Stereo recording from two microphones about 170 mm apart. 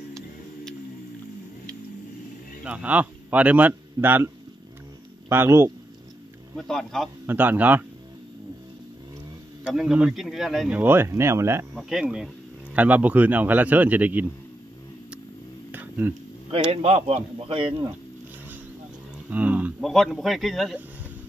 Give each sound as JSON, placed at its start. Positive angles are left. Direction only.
{"t": 2.6, "sound": "a man's voice", "side_deg": -10}
{"t": 5.3, "sound": "speech", "side_deg": -15}
{"t": 6.5, "sound": "speech", "side_deg": 5}
{"t": 7.2, "sound": "speech", "side_deg": -10}
{"t": 9.7, "sound": "speech", "side_deg": -5}
{"t": 10.8, "sound": "speech", "side_deg": -15}
{"t": 11.7, "sound": "speech", "side_deg": -5}
{"t": 15.7, "sound": "a sound", "side_deg": -10}
{"t": 16.7, "sound": "speech", "side_deg": -35}
{"t": 19.2, "sound": "a sound", "side_deg": -10}
{"t": 19.8, "sound": "speech", "side_deg": 0}